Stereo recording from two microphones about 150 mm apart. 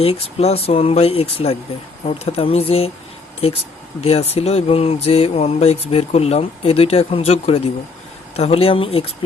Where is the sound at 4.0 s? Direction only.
40° left (ahead or behind).